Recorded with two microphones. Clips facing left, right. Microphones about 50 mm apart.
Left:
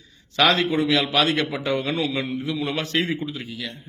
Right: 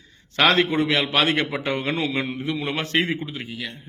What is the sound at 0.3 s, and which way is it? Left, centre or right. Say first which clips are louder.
A man's voice: right 1 dB; right.